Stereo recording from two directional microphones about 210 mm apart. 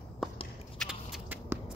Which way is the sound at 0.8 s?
5° right (ahead or behind).